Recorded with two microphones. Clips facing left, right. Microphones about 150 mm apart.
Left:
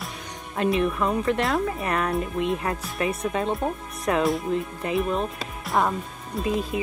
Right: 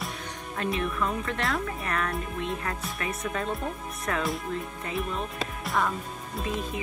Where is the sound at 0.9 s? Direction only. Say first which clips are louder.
Left 6 dB; 35° left (ahead or behind).